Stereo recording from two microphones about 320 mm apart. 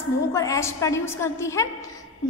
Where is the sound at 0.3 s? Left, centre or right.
Centre.